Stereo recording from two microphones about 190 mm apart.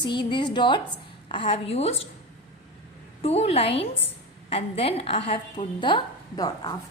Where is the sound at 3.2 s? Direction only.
35° left (ahead or behind).